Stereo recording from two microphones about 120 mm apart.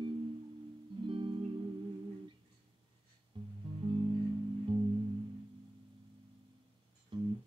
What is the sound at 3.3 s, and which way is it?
Music, 45° right (ahead or behind).